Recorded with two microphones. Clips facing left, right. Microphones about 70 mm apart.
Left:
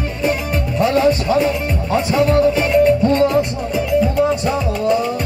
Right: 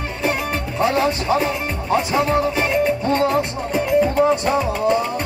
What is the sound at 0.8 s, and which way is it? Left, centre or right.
Music, centre.